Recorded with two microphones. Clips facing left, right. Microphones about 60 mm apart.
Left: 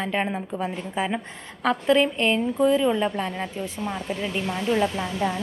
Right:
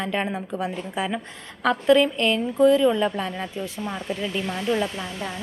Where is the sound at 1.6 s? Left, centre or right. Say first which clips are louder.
Right 2 dB; centre.